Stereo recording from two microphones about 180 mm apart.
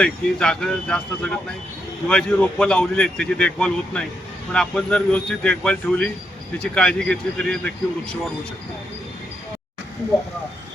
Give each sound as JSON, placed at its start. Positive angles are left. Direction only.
{"t": 0.0, "sound": "a man's voice", "side_deg": 5}